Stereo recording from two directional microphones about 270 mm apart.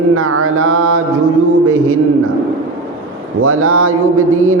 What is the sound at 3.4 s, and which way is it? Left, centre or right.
Mantra, right.